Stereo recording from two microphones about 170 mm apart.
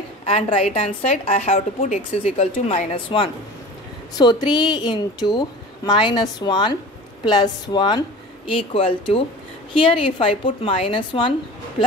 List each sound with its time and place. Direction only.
0.2 s a woman's voice: 35° left (ahead or behind)